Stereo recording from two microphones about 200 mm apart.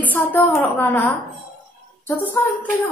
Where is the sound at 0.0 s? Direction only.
10° left (ahead or behind).